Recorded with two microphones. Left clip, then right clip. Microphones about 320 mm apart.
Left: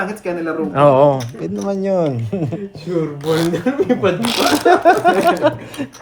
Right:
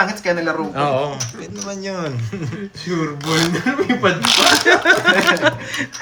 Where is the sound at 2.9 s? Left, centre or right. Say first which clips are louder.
Left 2 dB; centre.